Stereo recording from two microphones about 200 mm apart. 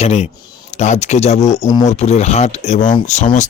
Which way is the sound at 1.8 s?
35° left (ahead or behind).